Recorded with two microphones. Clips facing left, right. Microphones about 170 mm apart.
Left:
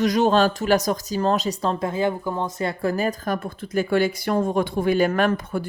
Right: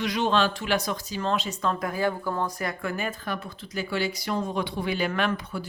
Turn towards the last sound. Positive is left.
turn(degrees=50)  # may be behind; listen again after turning